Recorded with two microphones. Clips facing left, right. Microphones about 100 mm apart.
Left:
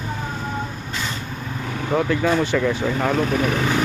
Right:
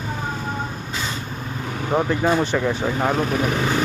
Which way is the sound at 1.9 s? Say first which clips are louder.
Even; 20° right (ahead or behind).